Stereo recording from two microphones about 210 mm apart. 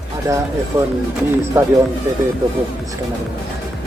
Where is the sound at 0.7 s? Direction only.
15° right (ahead or behind).